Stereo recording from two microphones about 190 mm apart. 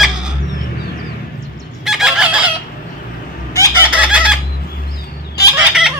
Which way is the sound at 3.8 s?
5° right (ahead or behind).